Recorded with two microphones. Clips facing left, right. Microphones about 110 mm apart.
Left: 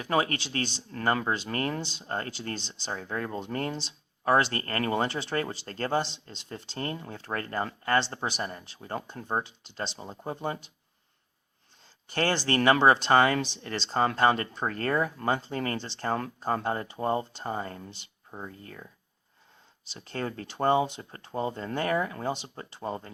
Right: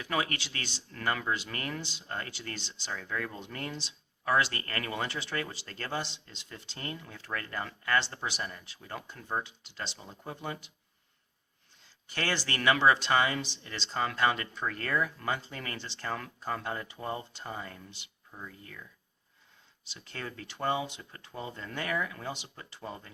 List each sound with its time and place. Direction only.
0.0 s speech: 35° left (ahead or behind)
12.1 s speech: 35° left (ahead or behind); by 13.7 s 50° left (ahead or behind)
13.7 s speech: 35° left (ahead or behind)
19.9 s speech: 35° left (ahead or behind)